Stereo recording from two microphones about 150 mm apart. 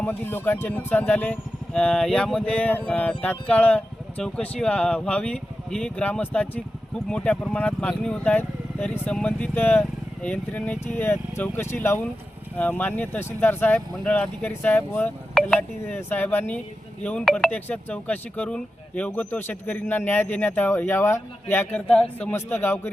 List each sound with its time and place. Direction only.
0.0 s speech: 10° left (ahead or behind)